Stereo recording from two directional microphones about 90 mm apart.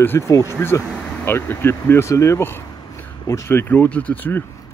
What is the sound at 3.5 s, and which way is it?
Speech, 25° left (ahead or behind).